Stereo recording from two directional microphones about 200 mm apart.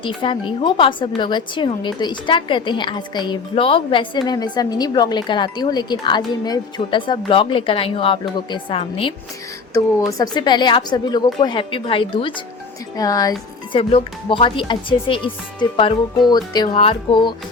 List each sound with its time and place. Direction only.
0.0 s a woman's voice: 25° left (ahead or behind)
16.3 s a woman's voice: 20° left (ahead or behind)